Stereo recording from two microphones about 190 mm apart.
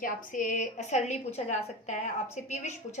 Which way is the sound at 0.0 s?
45° left (ahead or behind).